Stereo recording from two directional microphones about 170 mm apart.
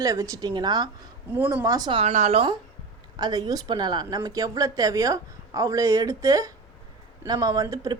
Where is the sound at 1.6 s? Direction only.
20° right (ahead or behind).